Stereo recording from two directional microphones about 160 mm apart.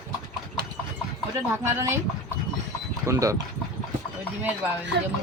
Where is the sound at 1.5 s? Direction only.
15° right (ahead or behind).